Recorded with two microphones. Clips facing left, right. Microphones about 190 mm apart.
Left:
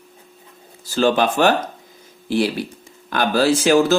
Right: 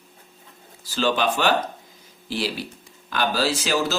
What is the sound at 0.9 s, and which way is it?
Speech, 50° left (ahead or behind).